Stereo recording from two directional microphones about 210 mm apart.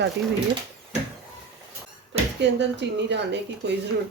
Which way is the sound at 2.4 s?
55° right (ahead or behind).